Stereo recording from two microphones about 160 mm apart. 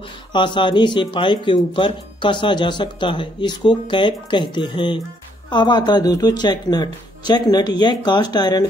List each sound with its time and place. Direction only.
0.3 s speech: 30° left (ahead or behind)